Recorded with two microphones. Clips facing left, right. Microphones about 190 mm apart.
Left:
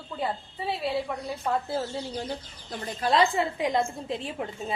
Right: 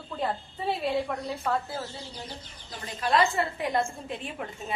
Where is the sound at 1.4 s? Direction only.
20° left (ahead or behind).